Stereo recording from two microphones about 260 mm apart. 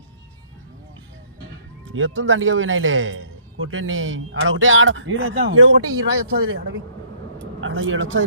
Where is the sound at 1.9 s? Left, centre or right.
Right.